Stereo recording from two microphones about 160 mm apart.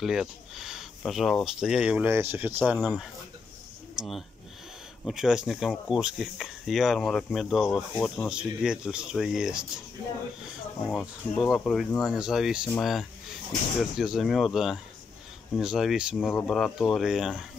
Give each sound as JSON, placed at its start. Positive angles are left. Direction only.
{"t": 0.0, "sound": "speech", "side_deg": 0}
{"t": 10.9, "sound": "speech", "side_deg": 0}